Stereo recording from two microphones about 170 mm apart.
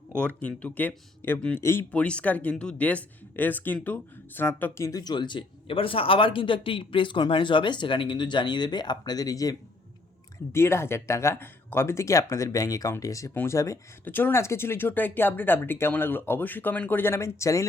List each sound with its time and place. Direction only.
0.2 s speech: 10° left (ahead or behind)